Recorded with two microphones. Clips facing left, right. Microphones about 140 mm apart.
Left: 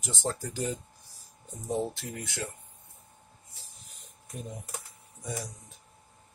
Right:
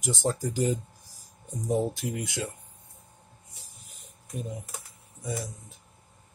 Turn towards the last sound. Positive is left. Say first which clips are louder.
# right 3 dB
turn(degrees=0)  # may be behind; listen again after turning